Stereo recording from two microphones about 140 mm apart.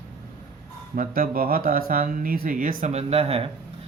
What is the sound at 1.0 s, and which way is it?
Speech, 85° right.